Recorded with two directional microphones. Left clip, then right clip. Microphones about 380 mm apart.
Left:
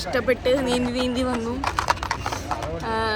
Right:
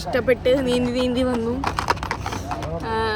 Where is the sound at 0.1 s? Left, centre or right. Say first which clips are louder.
Right 3 dB; centre.